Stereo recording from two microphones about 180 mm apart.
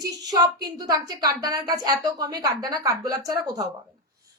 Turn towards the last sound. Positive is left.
turn(degrees=-20)  # may be behind; listen again after turning